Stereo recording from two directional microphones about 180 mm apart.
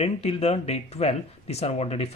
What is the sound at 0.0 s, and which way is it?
Speech, 35° left (ahead or behind).